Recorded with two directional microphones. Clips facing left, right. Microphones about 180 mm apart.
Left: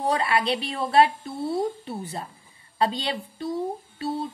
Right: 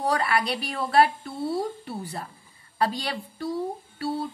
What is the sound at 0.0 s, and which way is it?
Speech, 25° left (ahead or behind).